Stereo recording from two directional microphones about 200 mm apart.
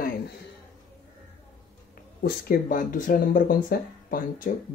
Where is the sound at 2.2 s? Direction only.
45° left (ahead or behind).